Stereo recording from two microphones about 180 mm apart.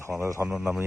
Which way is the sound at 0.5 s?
Centre (ahead or behind).